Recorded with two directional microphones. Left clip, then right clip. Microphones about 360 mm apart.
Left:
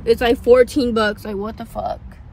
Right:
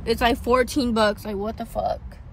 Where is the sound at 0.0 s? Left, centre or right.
Centre.